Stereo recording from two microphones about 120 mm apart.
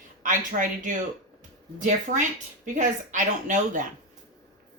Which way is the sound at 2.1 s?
90° right.